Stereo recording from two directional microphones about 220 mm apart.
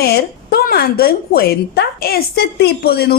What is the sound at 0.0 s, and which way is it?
A woman's voice, 45° left (ahead or behind).